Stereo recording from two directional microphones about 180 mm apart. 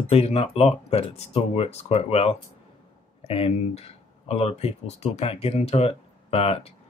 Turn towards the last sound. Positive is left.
turn(degrees=35)  # may be behind; listen again after turning